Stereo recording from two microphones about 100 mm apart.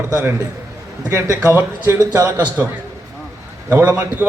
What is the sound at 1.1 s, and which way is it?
Speech, 30° right (ahead or behind).